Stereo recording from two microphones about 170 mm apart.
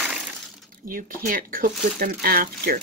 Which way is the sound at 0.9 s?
55° right (ahead or behind).